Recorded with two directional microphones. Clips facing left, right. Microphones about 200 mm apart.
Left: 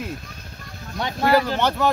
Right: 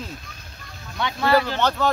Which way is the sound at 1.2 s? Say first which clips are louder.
Left 1 dB; 15° left (ahead or behind).